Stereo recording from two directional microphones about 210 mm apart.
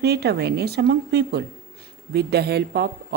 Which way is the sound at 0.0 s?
50° right (ahead or behind).